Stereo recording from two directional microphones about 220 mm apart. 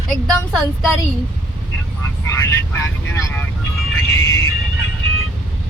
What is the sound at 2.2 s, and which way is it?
Speech, 10° left (ahead or behind).